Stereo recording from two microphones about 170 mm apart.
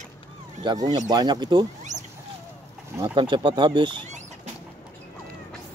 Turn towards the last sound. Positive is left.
turn(degrees=-30)  # may be behind; listen again after turning